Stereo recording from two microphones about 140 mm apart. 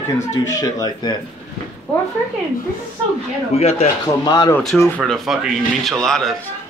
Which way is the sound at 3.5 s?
50° left (ahead or behind).